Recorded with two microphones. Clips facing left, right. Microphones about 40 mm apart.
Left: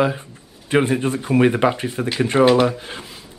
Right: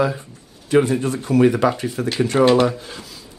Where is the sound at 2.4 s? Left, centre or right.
Centre.